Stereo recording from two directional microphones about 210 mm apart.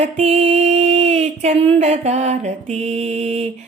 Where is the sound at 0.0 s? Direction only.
30° right (ahead or behind).